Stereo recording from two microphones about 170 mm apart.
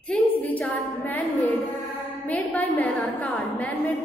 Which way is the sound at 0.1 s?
10° left (ahead or behind).